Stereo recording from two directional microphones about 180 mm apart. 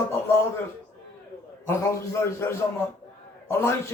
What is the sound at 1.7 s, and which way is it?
A man's voice, 15° left (ahead or behind).